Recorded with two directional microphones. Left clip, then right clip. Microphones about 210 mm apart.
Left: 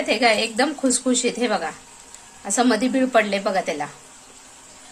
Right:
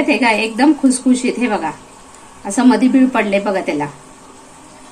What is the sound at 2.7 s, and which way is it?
A woman's voice, 35° left (ahead or behind).